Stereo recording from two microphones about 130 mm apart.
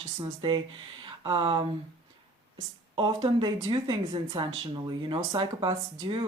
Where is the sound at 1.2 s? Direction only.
45° right (ahead or behind).